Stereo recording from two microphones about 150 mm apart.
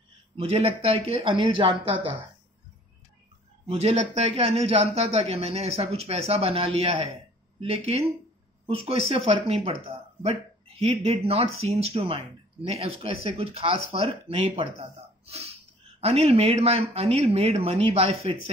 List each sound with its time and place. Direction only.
0.4 s speech: 40° right (ahead or behind)
3.6 s speech: 45° right (ahead or behind)
10.8 s speech: 40° right (ahead or behind)